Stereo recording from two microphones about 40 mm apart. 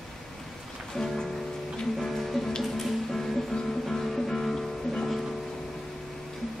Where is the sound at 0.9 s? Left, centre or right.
Centre.